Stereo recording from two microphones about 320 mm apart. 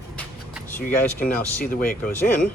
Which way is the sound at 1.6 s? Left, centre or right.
Left.